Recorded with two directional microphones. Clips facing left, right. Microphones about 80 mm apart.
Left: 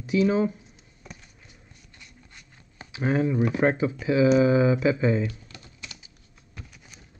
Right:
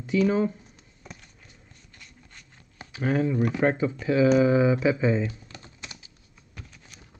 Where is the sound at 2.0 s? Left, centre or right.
Centre.